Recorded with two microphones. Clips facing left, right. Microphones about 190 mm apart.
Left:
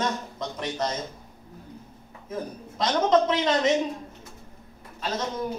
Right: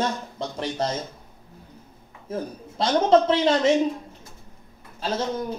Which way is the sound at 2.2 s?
30° right (ahead or behind).